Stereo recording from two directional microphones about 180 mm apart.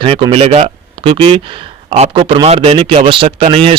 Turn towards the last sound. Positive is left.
turn(degrees=-30)  # may be behind; listen again after turning